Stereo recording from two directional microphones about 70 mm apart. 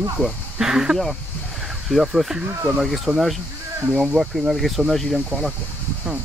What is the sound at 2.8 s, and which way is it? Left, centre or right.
Speech, centre.